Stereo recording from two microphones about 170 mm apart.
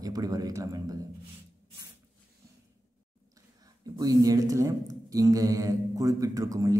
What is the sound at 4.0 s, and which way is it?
Speech, 20° right (ahead or behind).